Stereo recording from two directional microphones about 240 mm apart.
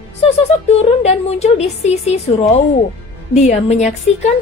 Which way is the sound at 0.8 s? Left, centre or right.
Left.